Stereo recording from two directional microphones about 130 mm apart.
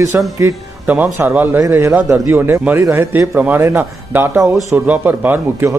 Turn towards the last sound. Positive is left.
turn(degrees=-15)  # may be behind; listen again after turning